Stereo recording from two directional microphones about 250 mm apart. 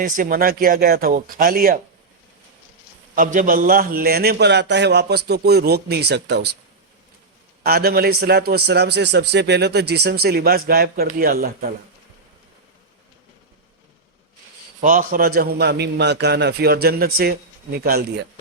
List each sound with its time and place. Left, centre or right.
0.0 s a man's voice: right
3.2 s a man's voice: right
7.6 s a man's voice: right
14.8 s a man's voice: right